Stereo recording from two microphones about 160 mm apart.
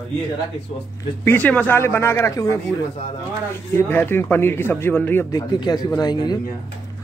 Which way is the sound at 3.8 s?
10° left (ahead or behind).